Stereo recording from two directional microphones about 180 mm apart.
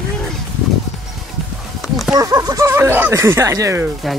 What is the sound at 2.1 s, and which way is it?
Speech, 20° right (ahead or behind).